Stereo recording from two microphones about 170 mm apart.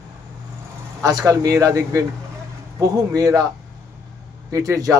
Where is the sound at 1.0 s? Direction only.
20° right (ahead or behind).